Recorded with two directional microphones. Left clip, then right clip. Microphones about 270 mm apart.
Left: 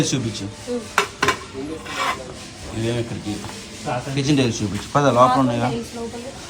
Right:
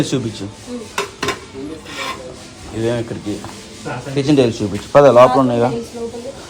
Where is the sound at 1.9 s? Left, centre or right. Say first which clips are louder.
Left 3 dB; centre.